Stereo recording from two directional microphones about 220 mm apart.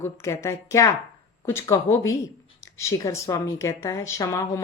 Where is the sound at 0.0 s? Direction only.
15° left (ahead or behind).